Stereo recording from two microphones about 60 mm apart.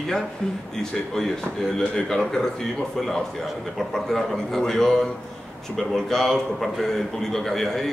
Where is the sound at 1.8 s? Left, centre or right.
Centre.